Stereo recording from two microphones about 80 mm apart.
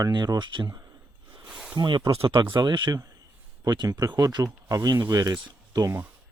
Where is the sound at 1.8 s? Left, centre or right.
Right.